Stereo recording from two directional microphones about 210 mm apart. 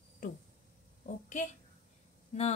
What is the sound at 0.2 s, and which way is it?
A woman's voice, 40° left (ahead or behind).